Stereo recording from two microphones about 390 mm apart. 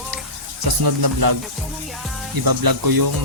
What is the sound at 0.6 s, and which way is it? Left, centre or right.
Music, right.